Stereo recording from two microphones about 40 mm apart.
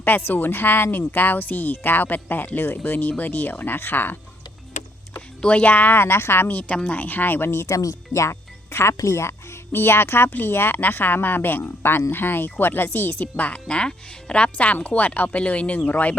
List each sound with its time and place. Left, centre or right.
0.3 s speech: left
3.1 s speech: left
3.8 s speech: left
5.5 s speech: left
5.9 s a woman's voice: left
6.5 s speech: left
8.3 s speech: left
9.7 s speech: left
10.8 s speech: left
13.2 s speech: left
13.7 s speech: left